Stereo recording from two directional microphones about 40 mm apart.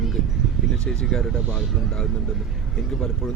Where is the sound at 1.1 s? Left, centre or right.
Centre.